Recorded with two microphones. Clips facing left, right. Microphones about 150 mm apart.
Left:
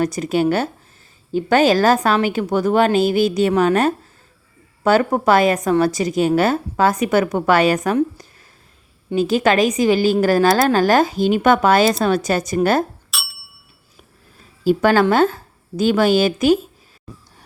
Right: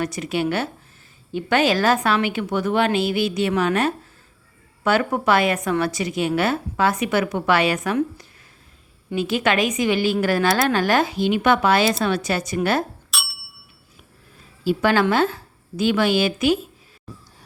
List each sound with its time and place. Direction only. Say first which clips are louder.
0.0 s a woman's voice: left 6 dB; 40° left (ahead or behind)
13.1 s bicycle bell: right 1 dB; centre (ahead or behind)
14.6 s a woman's voice: left 4 dB; 45° left (ahead or behind)